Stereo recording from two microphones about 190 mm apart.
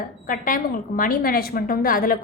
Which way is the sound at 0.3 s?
45° left (ahead or behind).